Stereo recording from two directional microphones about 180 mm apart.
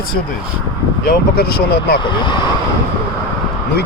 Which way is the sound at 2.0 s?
25° left (ahead or behind).